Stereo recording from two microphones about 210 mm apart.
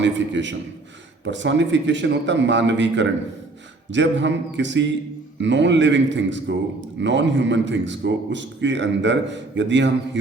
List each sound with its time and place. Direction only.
0.0 s a man's voice: 60° right (ahead or behind)